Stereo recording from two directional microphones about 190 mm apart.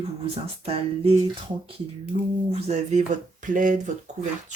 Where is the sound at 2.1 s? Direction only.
30° right (ahead or behind).